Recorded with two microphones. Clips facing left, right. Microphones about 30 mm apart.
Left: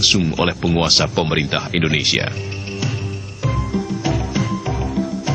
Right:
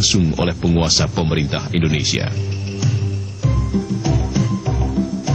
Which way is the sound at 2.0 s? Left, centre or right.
Left.